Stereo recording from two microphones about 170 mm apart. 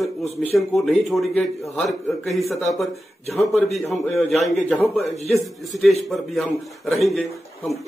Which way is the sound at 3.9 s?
40° left (ahead or behind).